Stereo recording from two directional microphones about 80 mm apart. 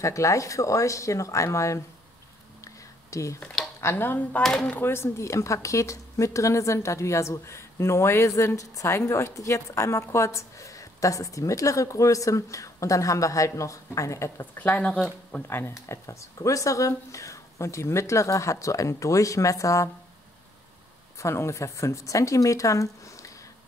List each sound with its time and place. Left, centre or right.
0.0 s speech: left
2.6 s a sound: left
3.8 s speech: left
4.4 s speech: centre
4.6 s speech: left
14.4 s speech: left
21.2 s speech: left